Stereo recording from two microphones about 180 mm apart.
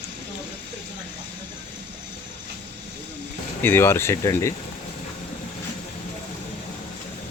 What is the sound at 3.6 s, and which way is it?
Speech, 10° left (ahead or behind).